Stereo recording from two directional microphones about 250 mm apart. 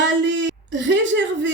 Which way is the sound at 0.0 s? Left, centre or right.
Right.